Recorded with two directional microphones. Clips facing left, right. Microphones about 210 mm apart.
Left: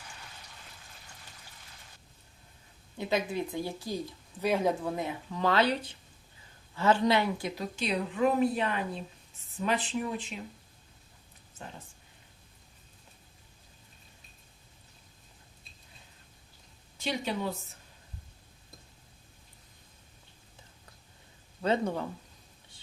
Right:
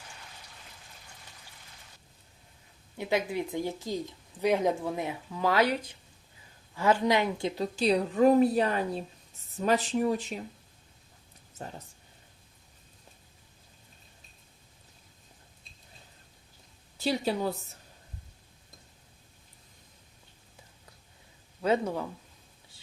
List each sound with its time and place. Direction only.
3.0 s a woman's voice: 15° right (ahead or behind); by 10.4 s 40° right (ahead or behind)
17.0 s a woman's voice: 35° right (ahead or behind)
21.6 s speech: 5° right (ahead or behind)